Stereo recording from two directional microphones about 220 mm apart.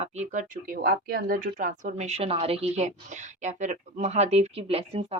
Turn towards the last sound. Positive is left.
turn(degrees=-25)  # may be behind; listen again after turning